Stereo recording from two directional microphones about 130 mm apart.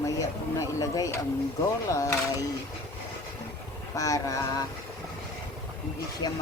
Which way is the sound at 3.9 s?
25° left (ahead or behind).